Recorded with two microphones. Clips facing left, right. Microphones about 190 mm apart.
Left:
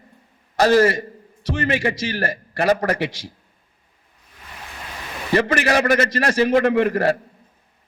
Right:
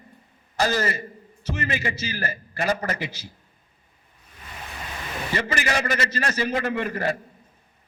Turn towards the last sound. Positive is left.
turn(degrees=65)  # may be behind; listen again after turning